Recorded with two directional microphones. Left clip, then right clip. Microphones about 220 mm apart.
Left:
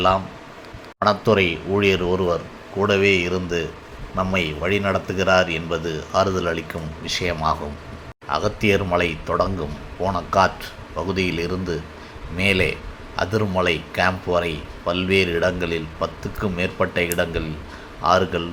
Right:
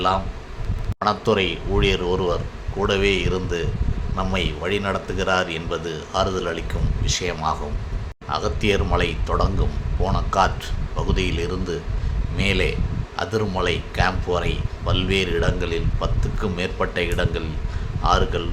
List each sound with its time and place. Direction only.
0.9 s speech: 10° left (ahead or behind)